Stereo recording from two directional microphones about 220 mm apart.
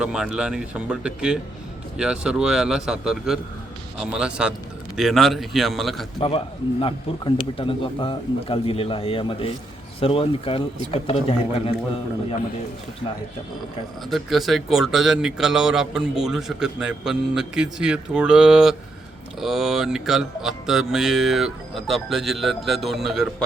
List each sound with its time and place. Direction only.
0.0 s speech: 5° right (ahead or behind)
6.1 s a man's voice: 25° left (ahead or behind)
14.1 s speech: centre (ahead or behind)